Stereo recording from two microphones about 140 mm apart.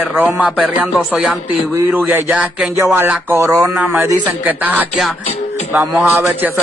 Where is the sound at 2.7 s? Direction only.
20° right (ahead or behind).